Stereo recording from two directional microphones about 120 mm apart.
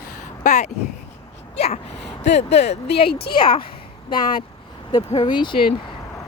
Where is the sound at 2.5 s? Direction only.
65° left (ahead or behind).